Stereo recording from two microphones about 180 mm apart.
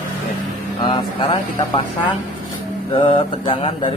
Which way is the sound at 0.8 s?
25° left (ahead or behind).